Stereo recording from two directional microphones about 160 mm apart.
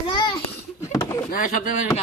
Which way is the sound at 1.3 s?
60° left (ahead or behind).